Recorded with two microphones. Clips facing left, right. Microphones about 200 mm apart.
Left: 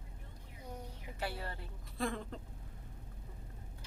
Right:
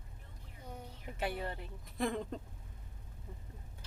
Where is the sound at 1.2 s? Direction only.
20° right (ahead or behind).